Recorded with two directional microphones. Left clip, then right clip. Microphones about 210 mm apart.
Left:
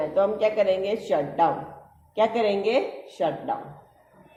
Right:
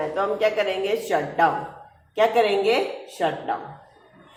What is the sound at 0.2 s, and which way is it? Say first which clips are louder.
Speech: left 1 dB; 50° left (ahead or behind).